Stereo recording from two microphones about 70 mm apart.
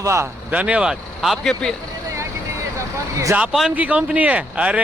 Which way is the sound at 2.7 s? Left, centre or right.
Right.